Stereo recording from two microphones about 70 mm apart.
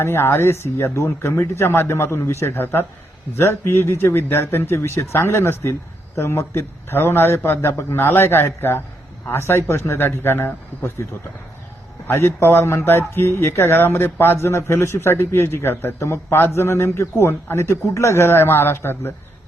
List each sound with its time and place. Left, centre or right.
0.0 s speech: left
12.0 s speech: left